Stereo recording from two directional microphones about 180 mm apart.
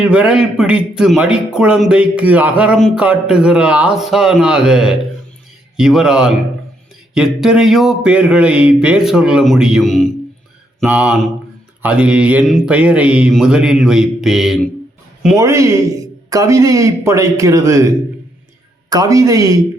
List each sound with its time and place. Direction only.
0.0 s speech: 5° right (ahead or behind)
10.8 s a man's voice: 10° right (ahead or behind)
15.4 s a man's voice: 15° right (ahead or behind)